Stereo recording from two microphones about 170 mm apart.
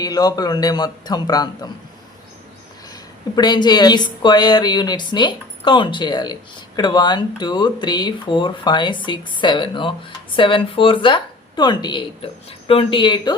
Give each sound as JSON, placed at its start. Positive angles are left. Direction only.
{"t": 0.0, "sound": "a woman's voice", "side_deg": 20}
{"t": 2.9, "sound": "a woman's voice", "side_deg": 25}